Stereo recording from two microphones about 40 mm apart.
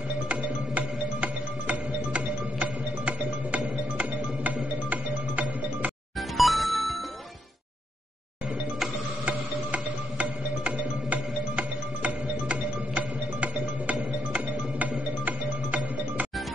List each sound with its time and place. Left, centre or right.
0.3 s music: right
6.3 s music: centre
9.2 s music: right